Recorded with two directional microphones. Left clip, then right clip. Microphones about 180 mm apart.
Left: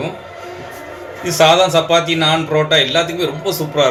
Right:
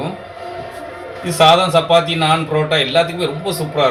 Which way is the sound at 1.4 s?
45° left (ahead or behind).